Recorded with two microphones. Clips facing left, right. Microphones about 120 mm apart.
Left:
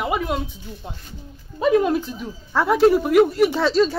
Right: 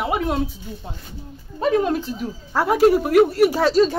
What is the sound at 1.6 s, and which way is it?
A woman's voice, 40° right (ahead or behind).